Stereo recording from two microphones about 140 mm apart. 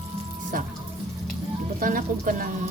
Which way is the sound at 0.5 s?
85° right.